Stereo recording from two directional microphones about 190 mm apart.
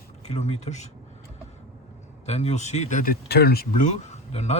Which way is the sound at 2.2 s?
35° left (ahead or behind).